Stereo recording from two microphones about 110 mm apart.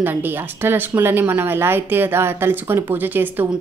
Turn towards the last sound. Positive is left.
turn(degrees=-20)  # may be behind; listen again after turning